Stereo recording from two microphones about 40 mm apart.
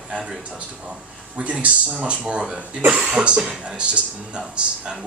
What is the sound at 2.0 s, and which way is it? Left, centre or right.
Speech, right.